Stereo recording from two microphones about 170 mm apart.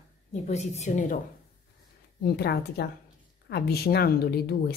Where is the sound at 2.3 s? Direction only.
70° left (ahead or behind).